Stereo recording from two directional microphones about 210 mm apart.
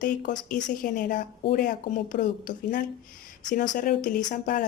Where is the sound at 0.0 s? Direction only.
40° left (ahead or behind).